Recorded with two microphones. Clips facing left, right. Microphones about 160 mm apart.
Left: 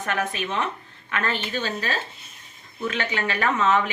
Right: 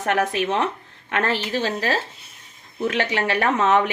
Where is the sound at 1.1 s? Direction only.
80° right.